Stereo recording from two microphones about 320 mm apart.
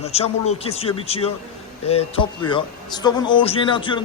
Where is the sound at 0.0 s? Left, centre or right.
Centre.